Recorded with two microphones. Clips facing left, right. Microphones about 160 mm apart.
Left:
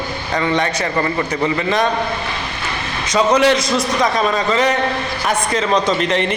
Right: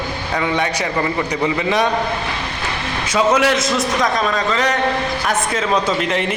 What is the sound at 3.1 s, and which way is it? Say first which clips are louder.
A man's voice: left 2 dB; 5° right (ahead or behind).